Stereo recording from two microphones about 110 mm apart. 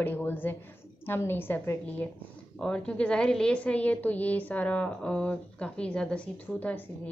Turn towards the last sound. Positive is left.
turn(degrees=15)  # may be behind; listen again after turning